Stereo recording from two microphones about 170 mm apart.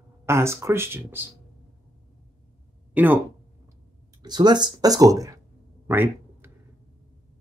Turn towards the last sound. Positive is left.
turn(degrees=-10)  # may be behind; listen again after turning